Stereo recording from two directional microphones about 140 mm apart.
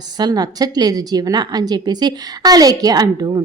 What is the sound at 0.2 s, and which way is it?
A woman's voice, 30° right (ahead or behind).